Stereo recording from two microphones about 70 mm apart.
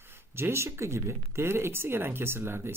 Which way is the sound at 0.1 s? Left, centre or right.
Right.